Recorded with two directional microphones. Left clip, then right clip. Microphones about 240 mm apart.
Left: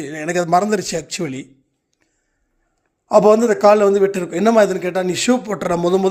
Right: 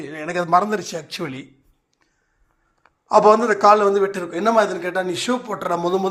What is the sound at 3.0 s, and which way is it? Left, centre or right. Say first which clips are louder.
A man's voice: left 2 dB; left.